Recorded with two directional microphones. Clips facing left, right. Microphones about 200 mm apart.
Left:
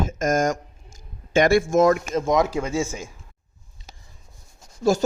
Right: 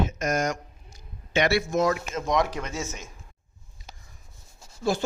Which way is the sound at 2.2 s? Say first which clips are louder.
Left 5 dB; 25° left (ahead or behind).